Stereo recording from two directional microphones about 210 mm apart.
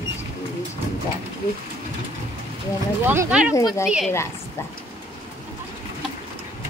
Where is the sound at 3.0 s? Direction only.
10° right (ahead or behind).